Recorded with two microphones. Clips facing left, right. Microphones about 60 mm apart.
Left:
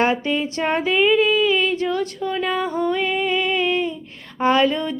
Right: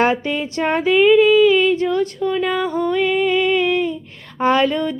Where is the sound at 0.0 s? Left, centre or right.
Right.